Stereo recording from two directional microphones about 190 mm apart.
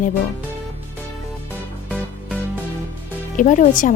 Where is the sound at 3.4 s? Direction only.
45° left (ahead or behind).